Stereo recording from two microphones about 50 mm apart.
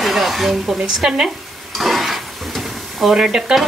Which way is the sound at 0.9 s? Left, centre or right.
Centre.